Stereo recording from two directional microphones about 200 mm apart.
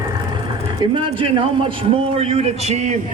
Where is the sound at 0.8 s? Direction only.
25° right (ahead or behind).